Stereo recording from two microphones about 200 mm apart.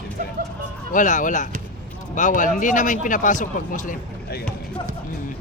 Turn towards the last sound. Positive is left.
turn(degrees=40)  # may be behind; listen again after turning